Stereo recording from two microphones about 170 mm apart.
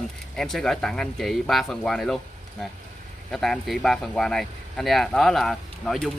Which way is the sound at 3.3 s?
Centre (ahead or behind).